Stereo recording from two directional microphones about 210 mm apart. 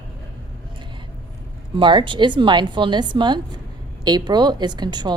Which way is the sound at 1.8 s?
25° right (ahead or behind).